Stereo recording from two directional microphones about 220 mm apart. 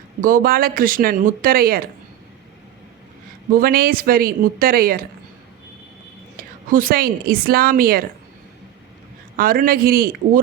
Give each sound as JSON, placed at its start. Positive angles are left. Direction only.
{"t": 0.2, "sound": "speech", "side_deg": -40}
{"t": 3.5, "sound": "speech", "side_deg": -40}
{"t": 6.3, "sound": "a woman's voice", "side_deg": -40}
{"t": 9.4, "sound": "speech", "side_deg": -40}